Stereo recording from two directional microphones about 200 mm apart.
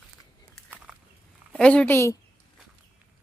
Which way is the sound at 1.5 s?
5° left (ahead or behind).